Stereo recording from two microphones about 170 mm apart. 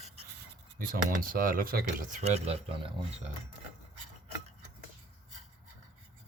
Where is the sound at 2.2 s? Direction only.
40° right (ahead or behind).